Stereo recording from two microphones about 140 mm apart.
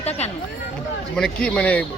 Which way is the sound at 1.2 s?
5° left (ahead or behind).